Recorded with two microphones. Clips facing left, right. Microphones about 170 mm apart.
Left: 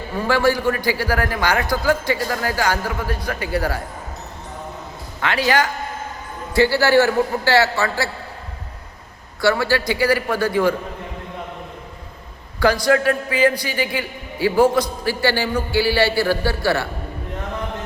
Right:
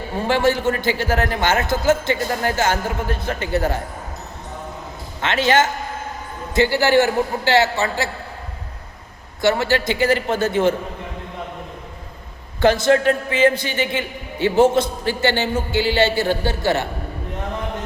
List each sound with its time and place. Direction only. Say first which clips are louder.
0.1 s a man's voice: even; 25° right (ahead or behind)
5.2 s a man's voice: right 2 dB; 25° right (ahead or behind)
9.4 s a man's voice: even; 20° right (ahead or behind)
12.5 s a man's voice: right 1 dB; 25° right (ahead or behind)